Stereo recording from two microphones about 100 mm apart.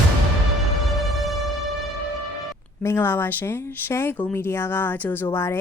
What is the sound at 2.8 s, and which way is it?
A woman's voice, 25° left (ahead or behind).